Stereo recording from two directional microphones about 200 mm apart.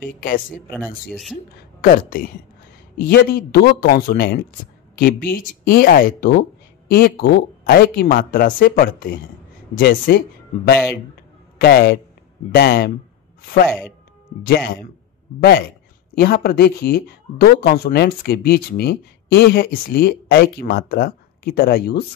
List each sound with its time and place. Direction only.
0.0 s speech: 45° left (ahead or behind)
1.1 s speech: centre (ahead or behind)
1.8 s a man's voice: 45° left (ahead or behind)
13.7 s speech: centre (ahead or behind)
14.4 s speech: 50° left (ahead or behind)
16.2 s speech: 50° left (ahead or behind)